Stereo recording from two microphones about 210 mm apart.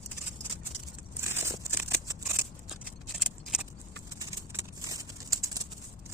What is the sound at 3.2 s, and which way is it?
Vehicle, centre (ahead or behind).